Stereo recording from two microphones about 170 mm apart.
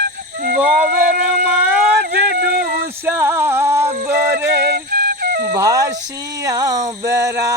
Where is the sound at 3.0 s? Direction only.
15° right (ahead or behind).